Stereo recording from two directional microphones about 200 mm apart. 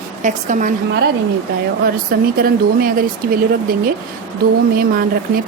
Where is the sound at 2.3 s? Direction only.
45° right (ahead or behind).